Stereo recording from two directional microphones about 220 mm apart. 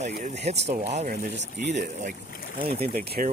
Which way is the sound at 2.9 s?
40° right (ahead or behind).